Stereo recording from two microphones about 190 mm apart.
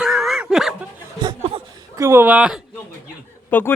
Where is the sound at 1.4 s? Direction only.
30° right (ahead or behind).